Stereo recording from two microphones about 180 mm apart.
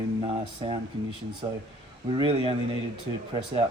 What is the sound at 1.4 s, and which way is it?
Speech, 20° right (ahead or behind).